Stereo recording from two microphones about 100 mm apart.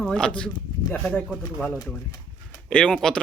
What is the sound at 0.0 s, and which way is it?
Speech, 10° left (ahead or behind).